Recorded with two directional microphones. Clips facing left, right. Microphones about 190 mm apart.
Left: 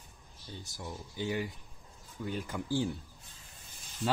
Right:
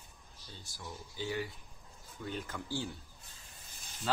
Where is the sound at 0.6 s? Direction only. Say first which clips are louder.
Left 3 dB; 15° left (ahead or behind).